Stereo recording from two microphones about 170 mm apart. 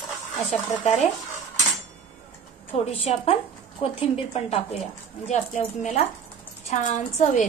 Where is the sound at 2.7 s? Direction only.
35° left (ahead or behind).